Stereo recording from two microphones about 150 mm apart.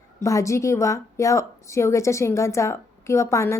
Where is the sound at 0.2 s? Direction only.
20° left (ahead or behind).